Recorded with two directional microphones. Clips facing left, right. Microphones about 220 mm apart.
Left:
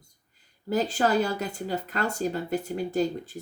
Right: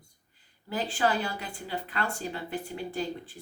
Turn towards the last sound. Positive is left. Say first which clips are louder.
# left 7 dB
turn(degrees=40)  # may be behind; listen again after turning